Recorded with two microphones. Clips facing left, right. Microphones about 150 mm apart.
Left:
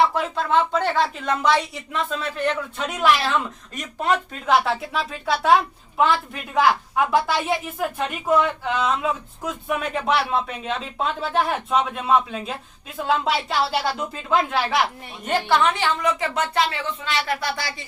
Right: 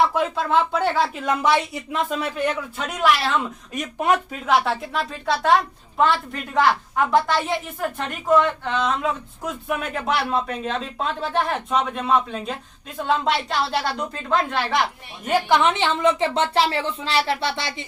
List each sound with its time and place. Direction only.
0.1 s a woman's voice: 5° right (ahead or behind)
3.8 s speech: 15° right (ahead or behind)
4.4 s a woman's voice: centre (ahead or behind)
15.3 s a woman's voice: 15° right (ahead or behind)